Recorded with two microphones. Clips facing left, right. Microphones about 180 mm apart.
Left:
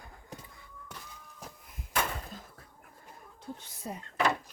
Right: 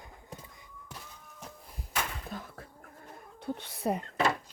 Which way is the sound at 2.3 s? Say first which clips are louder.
Right 6 dB; 65° right (ahead or behind).